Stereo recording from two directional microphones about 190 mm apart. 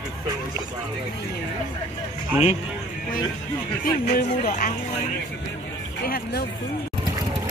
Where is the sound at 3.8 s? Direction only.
50° left (ahead or behind).